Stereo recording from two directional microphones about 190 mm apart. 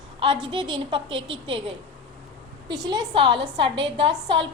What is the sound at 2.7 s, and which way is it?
A woman's voice, 25° right (ahead or behind).